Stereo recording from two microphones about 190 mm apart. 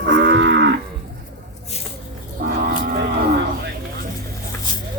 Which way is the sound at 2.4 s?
50° right (ahead or behind).